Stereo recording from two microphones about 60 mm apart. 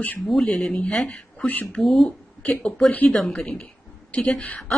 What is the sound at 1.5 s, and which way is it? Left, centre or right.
Speech, left.